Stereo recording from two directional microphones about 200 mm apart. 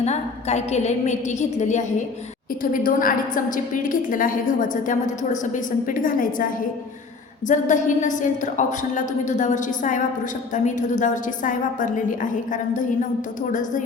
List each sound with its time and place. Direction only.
0.0 s a woman's voice: 35° left (ahead or behind)
2.8 s a woman's voice: 45° left (ahead or behind)